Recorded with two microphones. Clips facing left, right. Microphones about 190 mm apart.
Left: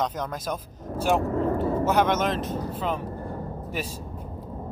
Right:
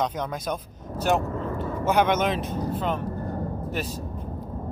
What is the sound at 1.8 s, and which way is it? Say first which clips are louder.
Speech: right 3 dB; centre (ahead or behind).